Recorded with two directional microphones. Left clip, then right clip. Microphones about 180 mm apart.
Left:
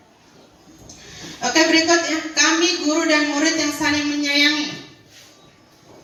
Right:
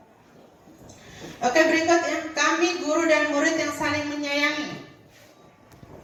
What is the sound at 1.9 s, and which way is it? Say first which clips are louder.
Speech: left 4 dB; centre (ahead or behind).